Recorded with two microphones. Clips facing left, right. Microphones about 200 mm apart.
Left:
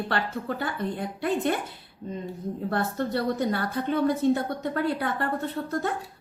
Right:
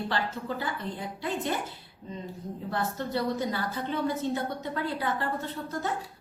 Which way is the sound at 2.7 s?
55° left (ahead or behind).